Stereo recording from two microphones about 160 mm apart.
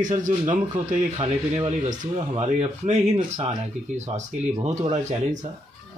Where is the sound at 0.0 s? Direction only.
55° right (ahead or behind).